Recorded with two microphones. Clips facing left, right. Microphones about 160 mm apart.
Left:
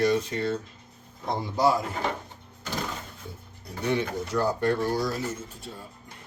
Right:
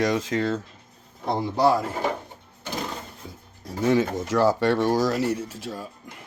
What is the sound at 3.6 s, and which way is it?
Speech, 90° right.